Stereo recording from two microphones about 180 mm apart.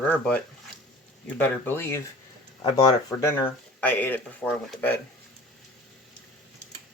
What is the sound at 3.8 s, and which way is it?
Speech, 10° left (ahead or behind).